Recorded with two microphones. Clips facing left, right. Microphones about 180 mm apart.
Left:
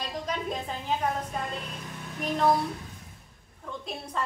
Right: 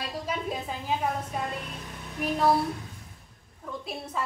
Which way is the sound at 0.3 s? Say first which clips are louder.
Right 1 dB; 5° right (ahead or behind).